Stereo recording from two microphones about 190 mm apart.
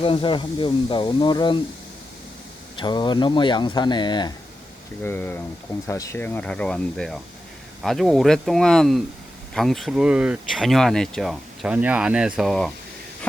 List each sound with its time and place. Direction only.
0.0 s speech: 25° left (ahead or behind)
2.7 s speech: 25° left (ahead or behind)
5.0 s speech: 10° left (ahead or behind)